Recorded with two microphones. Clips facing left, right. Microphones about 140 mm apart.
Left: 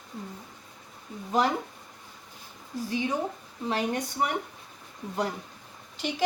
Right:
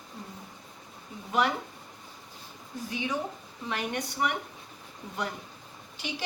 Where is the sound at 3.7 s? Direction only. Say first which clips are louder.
Left 4 dB; 35° left (ahead or behind).